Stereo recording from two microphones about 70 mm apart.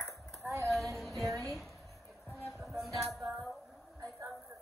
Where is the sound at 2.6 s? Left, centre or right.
Centre.